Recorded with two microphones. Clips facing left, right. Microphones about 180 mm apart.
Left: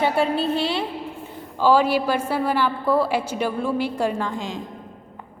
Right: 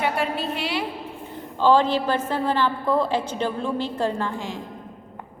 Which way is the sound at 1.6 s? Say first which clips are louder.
Left 1 dB; 10° left (ahead or behind).